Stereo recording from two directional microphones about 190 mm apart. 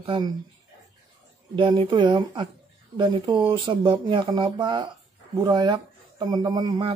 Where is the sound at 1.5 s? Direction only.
25° right (ahead or behind).